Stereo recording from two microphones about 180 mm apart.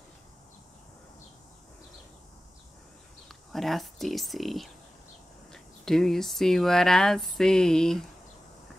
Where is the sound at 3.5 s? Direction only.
Centre (ahead or behind).